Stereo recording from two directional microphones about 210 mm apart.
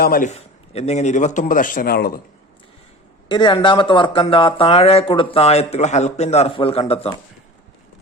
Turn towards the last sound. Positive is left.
turn(degrees=25)  # may be behind; listen again after turning